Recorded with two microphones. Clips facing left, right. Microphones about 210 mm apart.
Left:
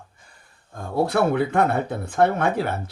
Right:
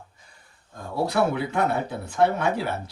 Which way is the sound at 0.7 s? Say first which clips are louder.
Left 3 dB; 50° left (ahead or behind).